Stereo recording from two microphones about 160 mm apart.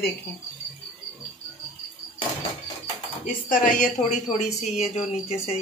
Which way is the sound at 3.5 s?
55° left (ahead or behind).